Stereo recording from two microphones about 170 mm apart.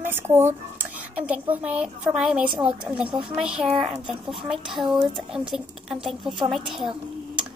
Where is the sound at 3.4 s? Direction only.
5° right (ahead or behind).